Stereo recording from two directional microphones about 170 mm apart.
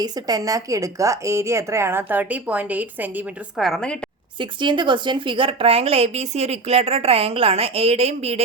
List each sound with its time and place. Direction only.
0.0 s a woman's voice: 20° right (ahead or behind)
3.6 s a woman's voice: 5° left (ahead or behind)
4.4 s speech: 30° right (ahead or behind)